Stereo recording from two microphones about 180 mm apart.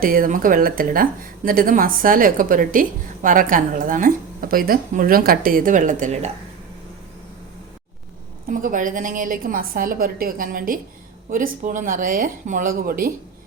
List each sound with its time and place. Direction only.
0.0 s a woman's voice: 50° right (ahead or behind)
8.4 s a woman's voice: 50° right (ahead or behind)